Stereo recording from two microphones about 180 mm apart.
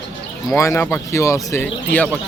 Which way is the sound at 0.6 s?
15° left (ahead or behind).